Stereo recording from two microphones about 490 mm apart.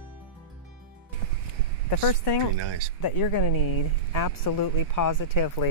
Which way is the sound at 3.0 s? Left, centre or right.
Left.